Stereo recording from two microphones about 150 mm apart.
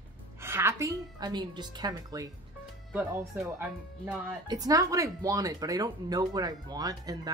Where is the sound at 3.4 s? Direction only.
15° right (ahead or behind).